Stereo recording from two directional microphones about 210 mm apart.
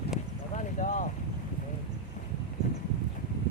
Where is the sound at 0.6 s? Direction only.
35° left (ahead or behind).